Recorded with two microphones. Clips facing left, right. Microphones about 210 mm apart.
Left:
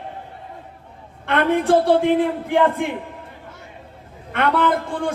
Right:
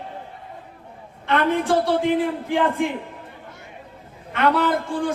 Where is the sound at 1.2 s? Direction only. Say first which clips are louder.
Left 2 dB; 55° left (ahead or behind).